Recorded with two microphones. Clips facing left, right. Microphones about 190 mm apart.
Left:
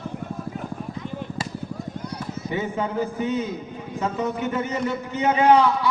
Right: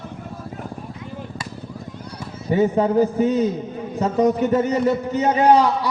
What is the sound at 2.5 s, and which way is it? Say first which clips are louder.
A man's voice: right 10 dB; 40° right (ahead or behind).